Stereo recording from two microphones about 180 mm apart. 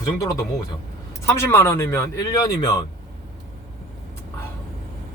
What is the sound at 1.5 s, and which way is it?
Speech, 15° left (ahead or behind).